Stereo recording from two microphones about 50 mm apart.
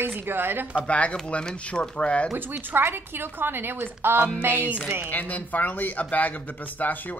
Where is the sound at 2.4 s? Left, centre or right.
Right.